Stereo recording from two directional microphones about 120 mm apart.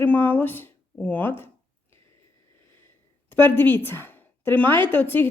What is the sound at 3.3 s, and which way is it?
A woman's voice, 15° left (ahead or behind).